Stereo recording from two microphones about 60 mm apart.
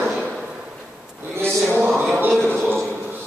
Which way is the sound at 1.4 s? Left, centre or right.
Right.